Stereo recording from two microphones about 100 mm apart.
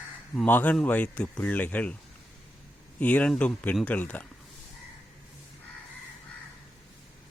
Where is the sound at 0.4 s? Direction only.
15° left (ahead or behind).